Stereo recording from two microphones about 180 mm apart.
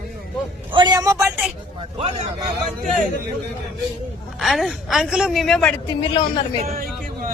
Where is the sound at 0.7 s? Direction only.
25° right (ahead or behind).